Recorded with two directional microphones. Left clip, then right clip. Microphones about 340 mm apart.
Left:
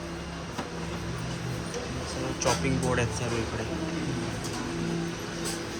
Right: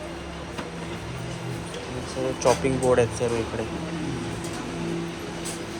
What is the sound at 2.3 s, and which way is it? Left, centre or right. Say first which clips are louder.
Speech: right 6 dB; centre.